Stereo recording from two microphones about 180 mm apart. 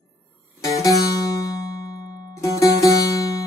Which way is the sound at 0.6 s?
20° left (ahead or behind).